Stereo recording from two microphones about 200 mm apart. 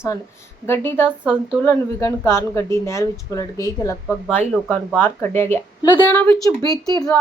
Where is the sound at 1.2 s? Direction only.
5° right (ahead or behind).